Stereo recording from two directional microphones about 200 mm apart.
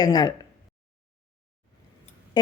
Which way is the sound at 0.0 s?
20° left (ahead or behind).